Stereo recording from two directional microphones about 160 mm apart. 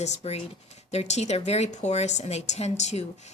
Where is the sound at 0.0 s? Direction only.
40° left (ahead or behind).